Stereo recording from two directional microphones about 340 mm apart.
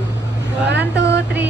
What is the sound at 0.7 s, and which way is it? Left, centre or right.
Vehicle, right.